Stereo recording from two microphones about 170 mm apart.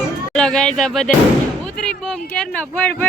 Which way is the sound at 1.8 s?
5° left (ahead or behind).